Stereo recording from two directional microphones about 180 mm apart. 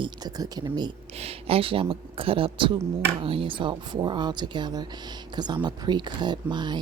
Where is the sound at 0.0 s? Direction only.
20° right (ahead or behind).